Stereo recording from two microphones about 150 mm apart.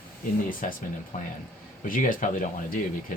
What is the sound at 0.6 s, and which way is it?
Speech, 60° left (ahead or behind).